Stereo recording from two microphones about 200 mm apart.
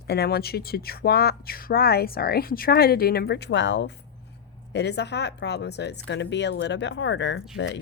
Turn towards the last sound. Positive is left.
turn(degrees=65)  # may be behind; listen again after turning